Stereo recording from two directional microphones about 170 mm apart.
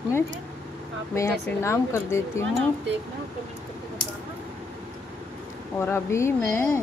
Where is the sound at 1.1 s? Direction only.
15° left (ahead or behind).